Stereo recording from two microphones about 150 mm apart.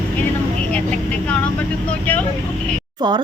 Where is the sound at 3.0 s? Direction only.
30° right (ahead or behind).